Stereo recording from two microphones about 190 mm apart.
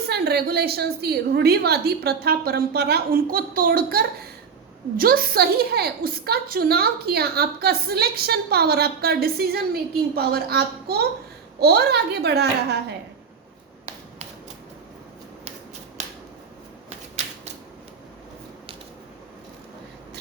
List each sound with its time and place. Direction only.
0.1 s a woman's voice: 55° right (ahead or behind)